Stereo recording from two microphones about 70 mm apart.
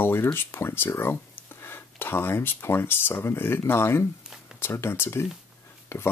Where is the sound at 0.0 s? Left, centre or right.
Left.